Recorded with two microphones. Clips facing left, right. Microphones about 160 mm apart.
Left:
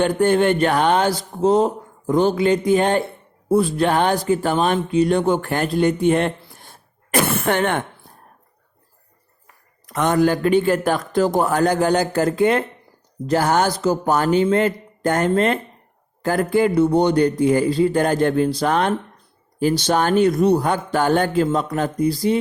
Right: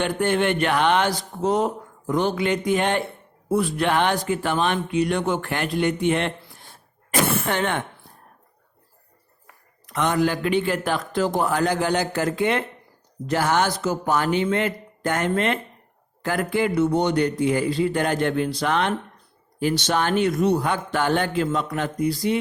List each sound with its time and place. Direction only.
0.0 s speech: 40° left (ahead or behind)
7.1 s a sound: 55° left (ahead or behind)
9.8 s a man's voice: 40° left (ahead or behind)